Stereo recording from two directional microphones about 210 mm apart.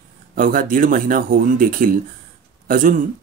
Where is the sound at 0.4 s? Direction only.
40° right (ahead or behind).